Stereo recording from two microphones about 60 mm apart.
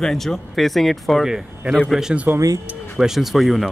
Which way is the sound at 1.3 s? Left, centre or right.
Centre.